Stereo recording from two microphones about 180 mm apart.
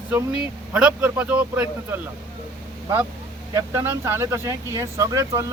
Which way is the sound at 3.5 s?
15° right (ahead or behind).